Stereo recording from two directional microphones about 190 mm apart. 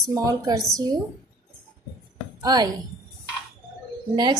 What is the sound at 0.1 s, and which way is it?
Speech, 20° right (ahead or behind).